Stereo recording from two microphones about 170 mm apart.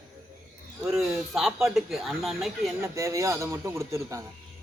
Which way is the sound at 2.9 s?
15° right (ahead or behind).